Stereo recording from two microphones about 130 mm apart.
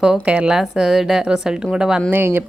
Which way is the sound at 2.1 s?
15° right (ahead or behind).